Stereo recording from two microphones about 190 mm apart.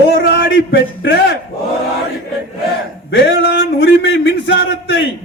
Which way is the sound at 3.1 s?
75° left (ahead or behind).